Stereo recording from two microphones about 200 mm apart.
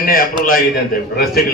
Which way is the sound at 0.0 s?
45° left (ahead or behind).